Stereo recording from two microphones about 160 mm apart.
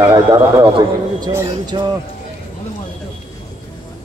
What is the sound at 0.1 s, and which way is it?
A man's voice, 20° right (ahead or behind).